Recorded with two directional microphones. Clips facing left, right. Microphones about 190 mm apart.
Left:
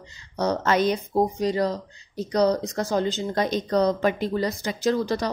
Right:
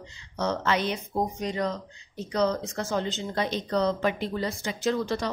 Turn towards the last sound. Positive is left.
turn(degrees=40)  # may be behind; listen again after turning